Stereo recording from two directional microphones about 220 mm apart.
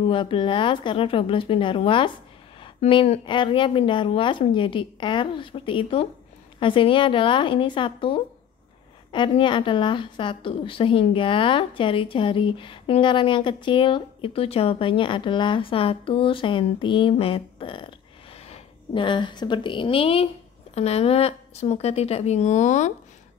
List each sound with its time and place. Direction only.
0.0 s a woman's voice: 25° left (ahead or behind)